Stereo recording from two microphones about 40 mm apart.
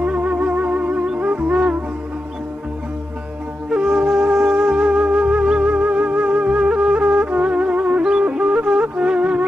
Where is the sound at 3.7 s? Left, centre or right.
Right.